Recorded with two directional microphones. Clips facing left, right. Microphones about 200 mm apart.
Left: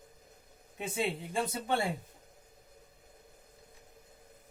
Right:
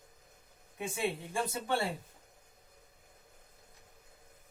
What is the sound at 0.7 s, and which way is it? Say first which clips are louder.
Speech: left 1 dB; 20° left (ahead or behind).